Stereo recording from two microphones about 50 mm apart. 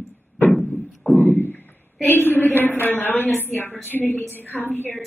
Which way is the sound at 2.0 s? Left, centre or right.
Left.